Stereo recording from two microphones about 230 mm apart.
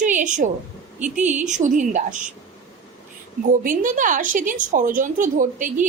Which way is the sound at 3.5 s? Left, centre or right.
Right.